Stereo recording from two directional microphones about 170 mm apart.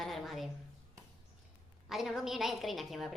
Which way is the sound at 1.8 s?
Centre (ahead or behind).